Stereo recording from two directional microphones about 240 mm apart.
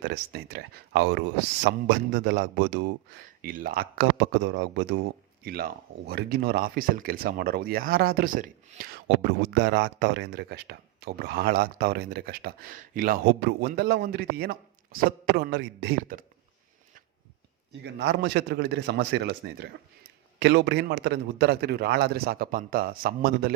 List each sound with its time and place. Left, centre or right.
0.0 s a man's voice: right
17.8 s a man's voice: right